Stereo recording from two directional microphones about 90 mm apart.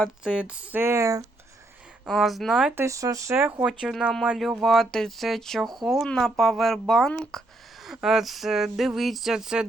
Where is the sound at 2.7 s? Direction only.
30° right (ahead or behind).